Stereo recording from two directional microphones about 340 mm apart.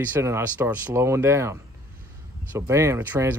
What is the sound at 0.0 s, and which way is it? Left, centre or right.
Speech, centre.